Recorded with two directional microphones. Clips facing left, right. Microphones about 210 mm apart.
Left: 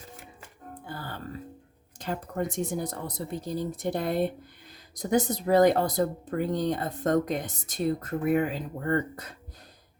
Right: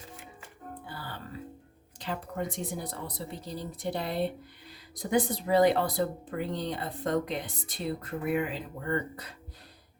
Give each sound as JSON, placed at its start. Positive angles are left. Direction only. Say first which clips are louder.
{"t": 0.9, "sound": "music", "louder": "left 5 dB", "side_deg": 45}
{"t": 2.0, "sound": "speech", "louder": "left 3 dB", "side_deg": 45}